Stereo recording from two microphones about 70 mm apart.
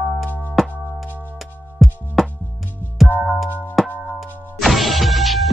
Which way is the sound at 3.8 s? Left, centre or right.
Centre.